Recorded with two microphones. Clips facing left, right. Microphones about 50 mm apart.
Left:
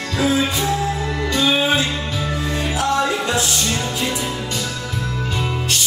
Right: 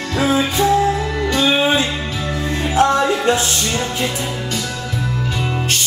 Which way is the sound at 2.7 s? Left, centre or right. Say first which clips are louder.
Right 5 dB; right.